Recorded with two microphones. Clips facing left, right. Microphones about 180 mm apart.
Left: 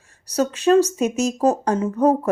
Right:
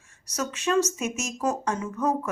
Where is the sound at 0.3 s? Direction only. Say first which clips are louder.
Left 10 dB; 30° left (ahead or behind).